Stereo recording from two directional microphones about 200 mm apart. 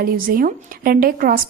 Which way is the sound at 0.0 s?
45° right (ahead or behind).